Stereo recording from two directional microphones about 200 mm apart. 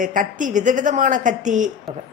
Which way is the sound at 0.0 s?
40° right (ahead or behind).